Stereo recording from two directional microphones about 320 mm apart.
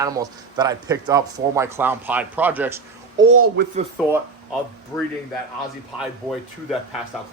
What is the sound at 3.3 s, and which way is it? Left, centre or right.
Speech, right.